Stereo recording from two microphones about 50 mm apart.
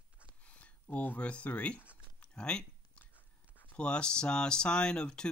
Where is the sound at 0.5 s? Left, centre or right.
Left.